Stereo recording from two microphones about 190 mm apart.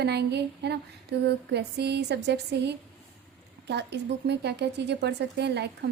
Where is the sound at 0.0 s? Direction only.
60° right (ahead or behind).